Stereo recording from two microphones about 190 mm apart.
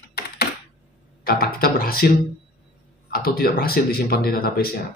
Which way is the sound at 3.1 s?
50° left (ahead or behind).